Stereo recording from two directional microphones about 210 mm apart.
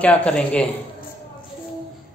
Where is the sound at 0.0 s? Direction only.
5° left (ahead or behind).